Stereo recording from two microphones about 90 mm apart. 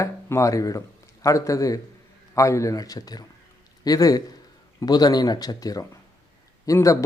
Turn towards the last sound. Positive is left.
turn(degrees=40)  # may be behind; listen again after turning